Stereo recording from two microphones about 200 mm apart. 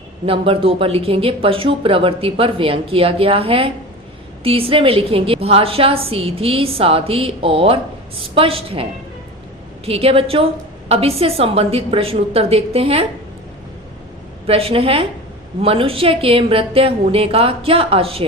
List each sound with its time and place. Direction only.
0.3 s speech: 25° right (ahead or behind)
14.4 s speech: 30° right (ahead or behind)